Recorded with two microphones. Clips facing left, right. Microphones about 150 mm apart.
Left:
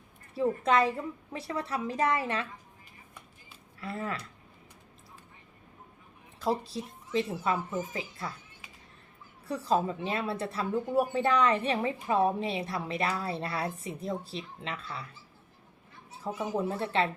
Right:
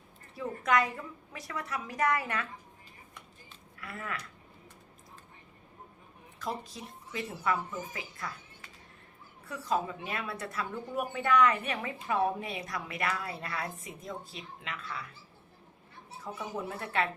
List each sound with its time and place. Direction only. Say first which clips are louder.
0.3 s speech: left 4 dB; 30° left (ahead or behind)
3.8 s speech: left 5 dB; 30° left (ahead or behind)
6.4 s a woman's voice: left 7 dB; 30° left (ahead or behind)
9.5 s speech: left 4 dB; 30° left (ahead or behind)
16.2 s speech: left 6 dB; 30° left (ahead or behind)